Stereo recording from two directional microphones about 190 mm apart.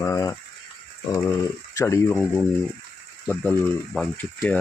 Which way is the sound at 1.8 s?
15° left (ahead or behind).